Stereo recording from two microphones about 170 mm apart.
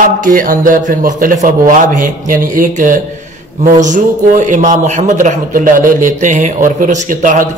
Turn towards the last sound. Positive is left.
turn(degrees=-50)  # may be behind; listen again after turning